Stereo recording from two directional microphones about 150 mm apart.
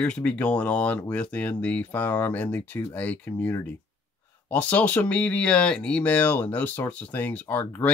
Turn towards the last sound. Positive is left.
turn(degrees=15)  # may be behind; listen again after turning